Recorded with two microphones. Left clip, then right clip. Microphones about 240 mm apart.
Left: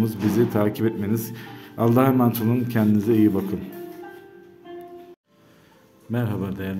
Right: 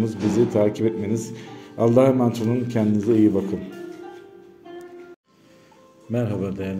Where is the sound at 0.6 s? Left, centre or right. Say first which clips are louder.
Right 3 dB; centre.